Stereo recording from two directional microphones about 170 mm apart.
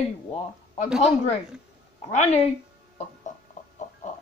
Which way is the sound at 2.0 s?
40° left (ahead or behind).